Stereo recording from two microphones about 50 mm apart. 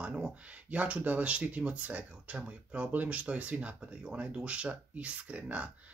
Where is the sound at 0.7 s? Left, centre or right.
Right.